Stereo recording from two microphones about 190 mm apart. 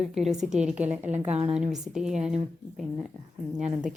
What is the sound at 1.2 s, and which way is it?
Speech, 30° right (ahead or behind).